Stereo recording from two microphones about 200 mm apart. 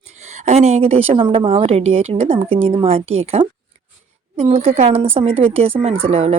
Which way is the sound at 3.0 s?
90° right.